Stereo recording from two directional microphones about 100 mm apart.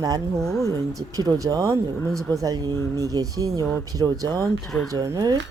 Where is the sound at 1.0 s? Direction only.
35° right (ahead or behind).